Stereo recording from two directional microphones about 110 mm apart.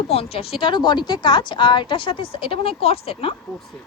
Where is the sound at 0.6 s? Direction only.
45° left (ahead or behind); by 3.3 s 60° left (ahead or behind).